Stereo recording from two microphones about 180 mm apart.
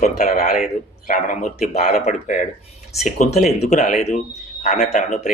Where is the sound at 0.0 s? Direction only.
50° left (ahead or behind).